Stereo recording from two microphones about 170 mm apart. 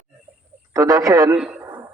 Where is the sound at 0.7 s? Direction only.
20° right (ahead or behind).